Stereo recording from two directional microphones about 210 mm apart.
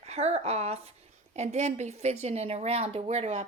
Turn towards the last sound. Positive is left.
turn(degrees=-30)  # may be behind; listen again after turning